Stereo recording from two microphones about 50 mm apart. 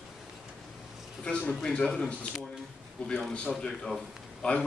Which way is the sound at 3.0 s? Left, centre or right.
Left.